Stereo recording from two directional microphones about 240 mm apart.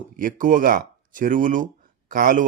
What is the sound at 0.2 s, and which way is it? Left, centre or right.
A man's voice, right.